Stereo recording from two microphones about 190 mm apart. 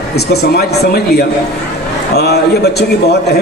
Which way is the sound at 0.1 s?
60° left (ahead or behind).